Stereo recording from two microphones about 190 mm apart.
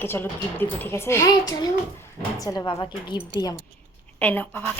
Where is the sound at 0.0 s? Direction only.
10° left (ahead or behind).